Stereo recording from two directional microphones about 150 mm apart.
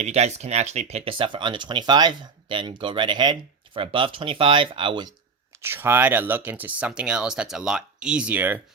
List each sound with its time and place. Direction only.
0.0 s speech: 50° right (ahead or behind); by 5.1 s 35° right (ahead or behind)
5.6 s speech: 15° right (ahead or behind)